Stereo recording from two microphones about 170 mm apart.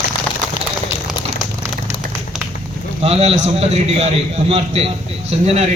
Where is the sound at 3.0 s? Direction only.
35° right (ahead or behind).